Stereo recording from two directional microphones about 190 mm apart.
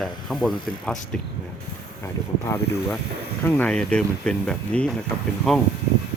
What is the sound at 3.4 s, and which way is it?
Speech, 10° left (ahead or behind).